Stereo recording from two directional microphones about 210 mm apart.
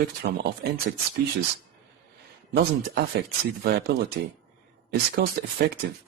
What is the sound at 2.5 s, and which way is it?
Speech, 50° right (ahead or behind).